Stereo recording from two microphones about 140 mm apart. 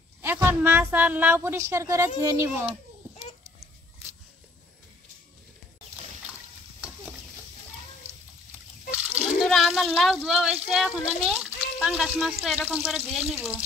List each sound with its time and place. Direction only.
0.2 s a woman's voice: 15° right (ahead or behind)
9.2 s a sound: centre (ahead or behind)
10.1 s speech: 5° right (ahead or behind)
13.3 s a woman's voice: 10° right (ahead or behind)